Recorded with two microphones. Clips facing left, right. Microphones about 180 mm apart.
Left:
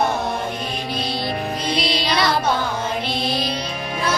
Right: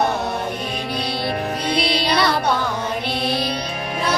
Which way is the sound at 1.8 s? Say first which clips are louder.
Right 2 dB; 60° right (ahead or behind).